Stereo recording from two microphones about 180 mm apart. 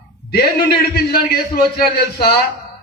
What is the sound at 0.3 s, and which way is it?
A man's voice, 60° left (ahead or behind).